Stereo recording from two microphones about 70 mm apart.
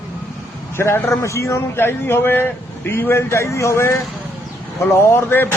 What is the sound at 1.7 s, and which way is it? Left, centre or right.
Speech, left.